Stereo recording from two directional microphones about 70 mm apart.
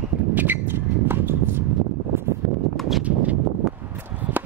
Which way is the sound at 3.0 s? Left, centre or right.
Centre.